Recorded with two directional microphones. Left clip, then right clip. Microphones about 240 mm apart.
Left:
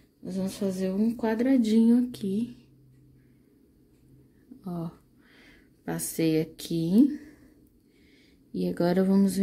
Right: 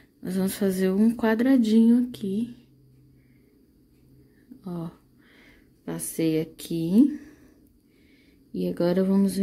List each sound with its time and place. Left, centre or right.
0.2 s speech: right; by 2.6 s centre
4.6 s speech: centre
8.5 s speech: centre